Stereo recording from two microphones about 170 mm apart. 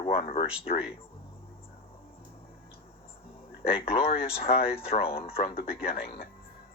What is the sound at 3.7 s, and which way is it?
Speech, 35° left (ahead or behind).